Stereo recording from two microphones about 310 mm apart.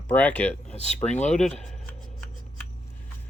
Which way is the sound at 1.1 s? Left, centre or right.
Left.